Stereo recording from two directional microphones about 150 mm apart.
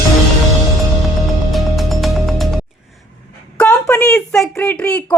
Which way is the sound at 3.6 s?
10° left (ahead or behind).